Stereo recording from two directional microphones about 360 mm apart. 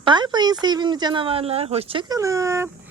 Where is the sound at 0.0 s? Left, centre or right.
Centre.